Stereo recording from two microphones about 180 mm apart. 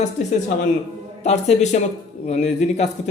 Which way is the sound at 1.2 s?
40° left (ahead or behind).